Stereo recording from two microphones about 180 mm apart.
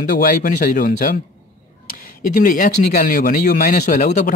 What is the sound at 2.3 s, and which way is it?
Speech, 50° left (ahead or behind).